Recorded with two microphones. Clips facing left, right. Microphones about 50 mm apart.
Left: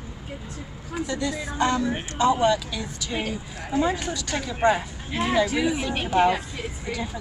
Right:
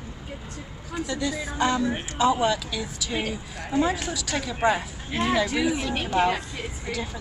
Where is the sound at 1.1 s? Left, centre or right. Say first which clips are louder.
Even; centre.